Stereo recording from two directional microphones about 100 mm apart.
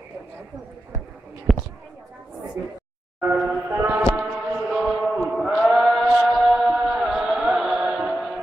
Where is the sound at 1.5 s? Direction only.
Centre (ahead or behind).